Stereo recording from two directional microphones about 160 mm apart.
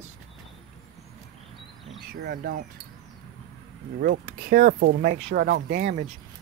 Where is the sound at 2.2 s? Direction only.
75° right (ahead or behind).